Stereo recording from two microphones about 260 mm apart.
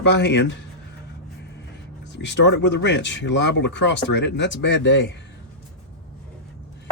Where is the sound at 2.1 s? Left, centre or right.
Left.